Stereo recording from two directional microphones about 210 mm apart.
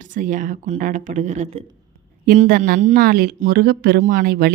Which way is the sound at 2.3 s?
45° right (ahead or behind).